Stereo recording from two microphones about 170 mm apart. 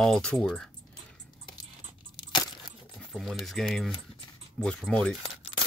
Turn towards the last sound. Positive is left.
turn(degrees=5)  # may be behind; listen again after turning